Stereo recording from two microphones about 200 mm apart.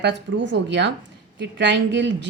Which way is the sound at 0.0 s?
60° right (ahead or behind).